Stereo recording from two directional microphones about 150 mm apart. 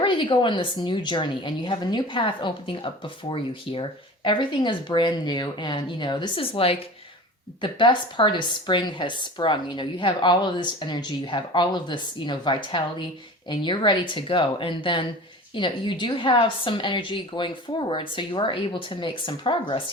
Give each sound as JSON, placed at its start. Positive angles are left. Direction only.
{"t": 0.0, "sound": "a woman's voice", "side_deg": 35}